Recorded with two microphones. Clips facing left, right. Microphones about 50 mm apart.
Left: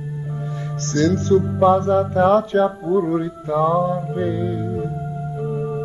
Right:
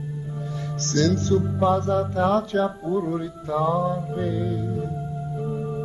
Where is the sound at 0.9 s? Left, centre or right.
Left.